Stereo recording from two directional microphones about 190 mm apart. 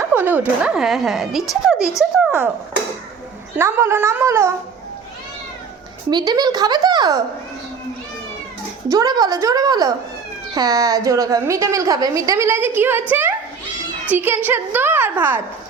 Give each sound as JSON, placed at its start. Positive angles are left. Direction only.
{"t": 0.0, "sound": "speech", "side_deg": -10}
{"t": 3.6, "sound": "a woman's voice", "side_deg": -15}
{"t": 6.1, "sound": "speech", "side_deg": -20}
{"t": 8.9, "sound": "a woman's voice", "side_deg": -20}